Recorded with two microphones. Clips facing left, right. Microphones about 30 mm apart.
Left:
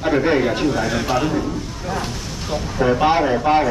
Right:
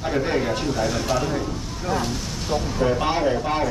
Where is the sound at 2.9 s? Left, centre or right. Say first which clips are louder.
Left 5 dB; left.